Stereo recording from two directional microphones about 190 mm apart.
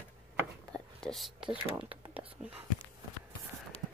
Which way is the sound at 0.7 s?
Centre (ahead or behind).